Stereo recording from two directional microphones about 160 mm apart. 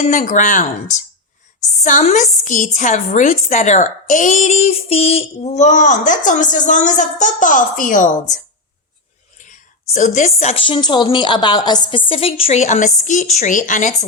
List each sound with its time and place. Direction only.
0.0 s a woman's voice: 55° left (ahead or behind)
9.9 s a woman's voice: 50° left (ahead or behind)
10.7 s a woman's voice: 30° left (ahead or behind); by 13.9 s 50° left (ahead or behind)